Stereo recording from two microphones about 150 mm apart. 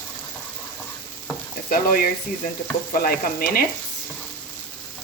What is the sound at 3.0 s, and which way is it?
Speech, 85° left.